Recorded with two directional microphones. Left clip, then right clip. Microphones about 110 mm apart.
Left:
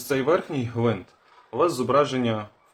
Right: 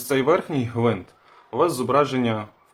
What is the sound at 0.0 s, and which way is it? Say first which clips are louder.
A man's voice: right 2 dB; 25° right (ahead or behind).